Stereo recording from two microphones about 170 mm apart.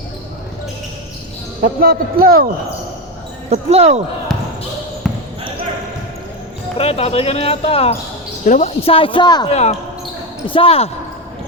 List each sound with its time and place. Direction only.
1.6 s speech: 60° right (ahead or behind)
3.5 s speech: 40° right (ahead or behind)
4.3 s basketball bounce: centre (ahead or behind)
6.7 s speech: 35° left (ahead or behind)
9.5 s speech: 40° left (ahead or behind)